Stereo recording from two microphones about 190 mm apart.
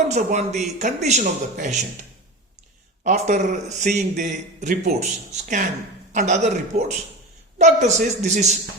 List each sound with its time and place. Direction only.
0.1 s a man's voice: 35° right (ahead or behind)
3.0 s a man's voice: 40° right (ahead or behind)